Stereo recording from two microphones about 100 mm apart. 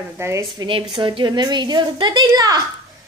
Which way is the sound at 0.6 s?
60° right (ahead or behind).